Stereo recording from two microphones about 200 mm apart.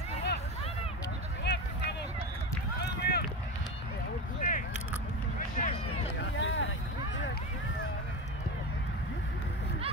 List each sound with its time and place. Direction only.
1.4 s a sound: 55° left (ahead or behind)
2.8 s run: 55° left (ahead or behind)
4.4 s single-lens reflex camera: 40° left (ahead or behind)
5.6 s run: 40° left (ahead or behind)
6.3 s vehicle: 70° left (ahead or behind)